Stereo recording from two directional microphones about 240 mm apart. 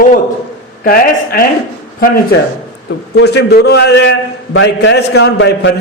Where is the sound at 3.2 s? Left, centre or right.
Left.